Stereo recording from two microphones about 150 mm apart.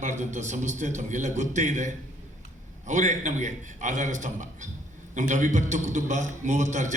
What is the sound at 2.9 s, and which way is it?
A man's voice, 55° right (ahead or behind).